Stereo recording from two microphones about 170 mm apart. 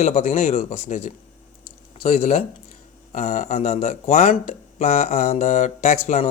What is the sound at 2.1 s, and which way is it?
Speech, 40° left (ahead or behind).